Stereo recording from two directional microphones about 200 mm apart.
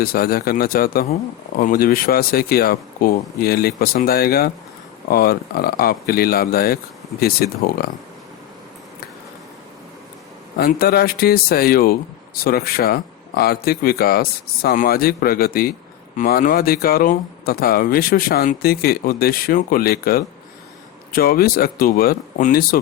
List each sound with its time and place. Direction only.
0.0 s speech: 50° left (ahead or behind)
10.6 s speech: 50° left (ahead or behind)